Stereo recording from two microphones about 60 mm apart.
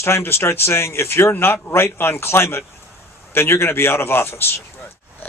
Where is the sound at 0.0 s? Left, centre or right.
Left.